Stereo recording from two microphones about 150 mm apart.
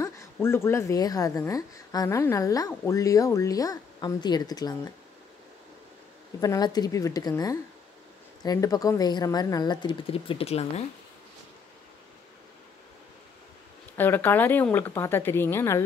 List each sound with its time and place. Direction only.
0.0 s a woman's voice: 15° left (ahead or behind)
6.4 s a woman's voice: 25° left (ahead or behind); by 10.7 s 45° left (ahead or behind)
13.9 s speech: 15° left (ahead or behind)